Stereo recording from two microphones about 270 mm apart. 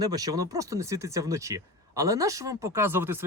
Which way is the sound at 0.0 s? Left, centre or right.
Centre.